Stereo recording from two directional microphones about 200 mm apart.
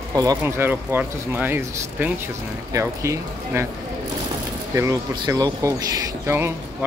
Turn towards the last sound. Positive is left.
turn(degrees=-15)  # may be behind; listen again after turning